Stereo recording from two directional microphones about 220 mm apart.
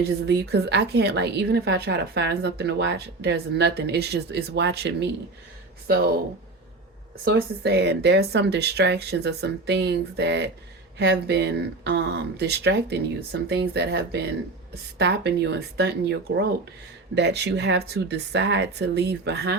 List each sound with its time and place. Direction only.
0.3 s a woman's voice: 50° right (ahead or behind)
7.3 s a woman's voice: 50° right (ahead or behind)